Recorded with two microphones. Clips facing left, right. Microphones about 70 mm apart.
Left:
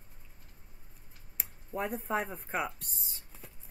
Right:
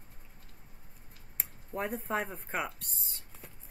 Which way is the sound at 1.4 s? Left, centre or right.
Centre.